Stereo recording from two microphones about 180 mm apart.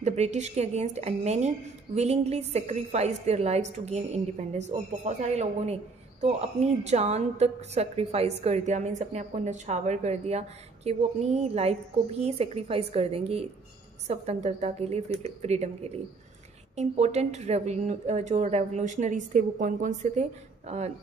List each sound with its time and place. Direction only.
0.0 s a woman's voice: 40° right (ahead or behind)